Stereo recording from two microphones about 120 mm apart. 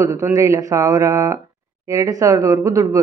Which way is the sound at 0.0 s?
25° right (ahead or behind).